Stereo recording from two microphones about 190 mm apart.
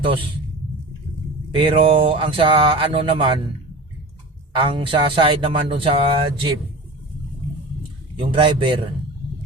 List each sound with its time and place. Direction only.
1.5 s speech: 25° right (ahead or behind)
4.5 s speech: 25° right (ahead or behind)
8.2 s speech: 25° right (ahead or behind)